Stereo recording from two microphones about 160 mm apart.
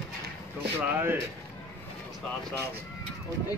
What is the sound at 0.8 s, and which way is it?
Speech, 10° right (ahead or behind).